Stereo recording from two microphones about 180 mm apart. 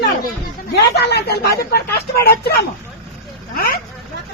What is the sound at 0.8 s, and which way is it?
Speech, 70° left (ahead or behind).